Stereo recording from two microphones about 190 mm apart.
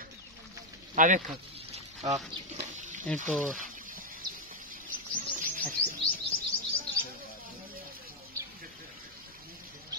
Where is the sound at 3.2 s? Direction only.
Centre (ahead or behind).